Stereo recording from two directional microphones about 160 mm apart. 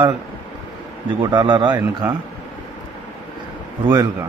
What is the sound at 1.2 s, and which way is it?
Speech, 30° right (ahead or behind).